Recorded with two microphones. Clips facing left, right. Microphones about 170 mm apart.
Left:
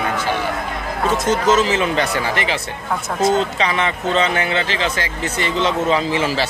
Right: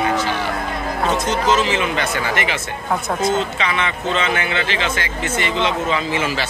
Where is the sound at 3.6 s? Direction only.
40° left (ahead or behind).